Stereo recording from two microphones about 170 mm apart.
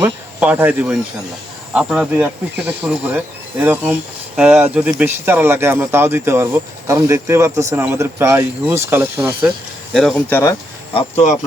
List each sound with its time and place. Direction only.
0.0 s speech: 10° right (ahead or behind)
9.9 s speech: centre (ahead or behind)
10.9 s speech: 40° left (ahead or behind)